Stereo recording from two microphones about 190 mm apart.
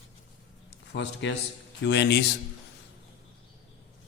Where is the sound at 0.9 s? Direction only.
70° left (ahead or behind).